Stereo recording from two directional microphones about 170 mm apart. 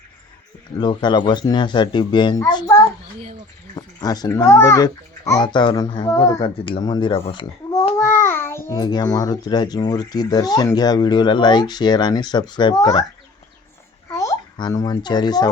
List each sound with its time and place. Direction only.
0.8 s a child's voice: 25° left (ahead or behind)
3.8 s a child's voice: 25° left (ahead or behind)
7.9 s a child's voice: 15° left (ahead or behind)
14.2 s a child's voice: 20° left (ahead or behind)